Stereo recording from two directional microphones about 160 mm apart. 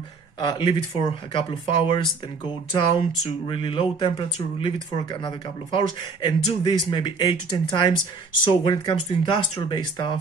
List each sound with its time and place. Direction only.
0.4 s speech: 30° left (ahead or behind)
5.8 s speech: 30° left (ahead or behind)